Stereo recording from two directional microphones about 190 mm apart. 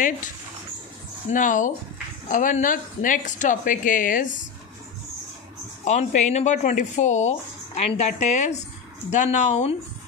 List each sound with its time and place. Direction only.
1.3 s a woman's voice: 45° left (ahead or behind)
5.9 s speech: 40° left (ahead or behind)